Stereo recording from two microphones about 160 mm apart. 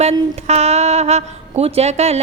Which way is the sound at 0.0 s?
40° right (ahead or behind).